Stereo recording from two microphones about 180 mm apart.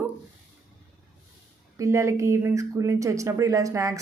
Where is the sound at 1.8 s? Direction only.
15° right (ahead or behind).